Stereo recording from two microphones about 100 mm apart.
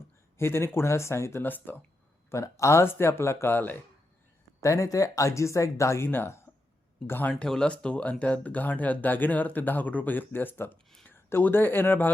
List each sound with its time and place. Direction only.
0.3 s speech: 25° left (ahead or behind)
2.3 s speech: 30° left (ahead or behind)
4.6 s speech: 30° left (ahead or behind)
7.1 s speech: 15° left (ahead or behind)